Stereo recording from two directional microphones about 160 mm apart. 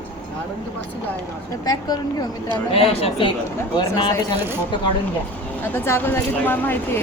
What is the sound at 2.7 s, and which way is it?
Speech, 35° left (ahead or behind).